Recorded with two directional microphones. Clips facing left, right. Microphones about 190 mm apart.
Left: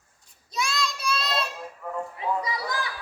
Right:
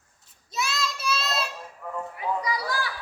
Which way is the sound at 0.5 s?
5° right (ahead or behind).